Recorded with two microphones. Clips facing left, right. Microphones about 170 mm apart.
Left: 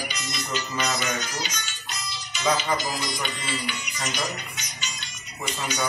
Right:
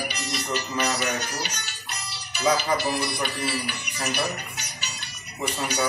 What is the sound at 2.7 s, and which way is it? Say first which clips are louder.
Speech: right 3 dB; 65° right (ahead or behind).